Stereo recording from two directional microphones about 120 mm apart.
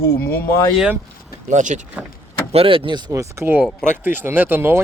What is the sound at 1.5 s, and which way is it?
Speech, 90° right.